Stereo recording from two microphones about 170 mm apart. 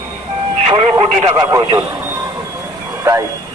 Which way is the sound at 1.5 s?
20° right (ahead or behind).